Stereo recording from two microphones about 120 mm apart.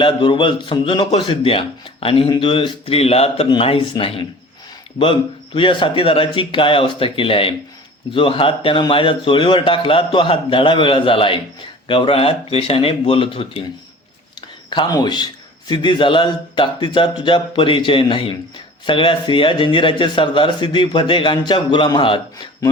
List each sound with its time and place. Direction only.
0.0 s a man's voice: 40° left (ahead or behind); by 3.4 s 55° left (ahead or behind)
3.5 s a man's voice: 45° left (ahead or behind)
5.5 s a man's voice: 45° left (ahead or behind)
14.7 s a man's voice: 40° left (ahead or behind)